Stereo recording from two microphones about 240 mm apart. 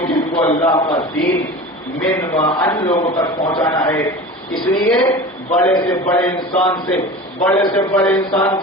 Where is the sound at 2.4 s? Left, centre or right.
Centre.